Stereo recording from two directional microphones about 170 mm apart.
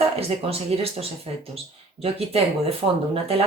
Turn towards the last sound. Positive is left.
turn(degrees=-35)  # may be behind; listen again after turning